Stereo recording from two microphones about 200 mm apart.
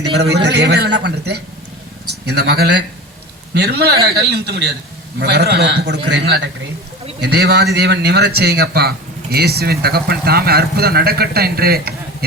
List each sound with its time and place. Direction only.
0.0 s a man's voice: 55° right (ahead or behind)